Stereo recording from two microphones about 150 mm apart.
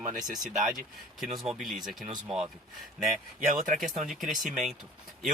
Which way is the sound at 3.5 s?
65° right (ahead or behind).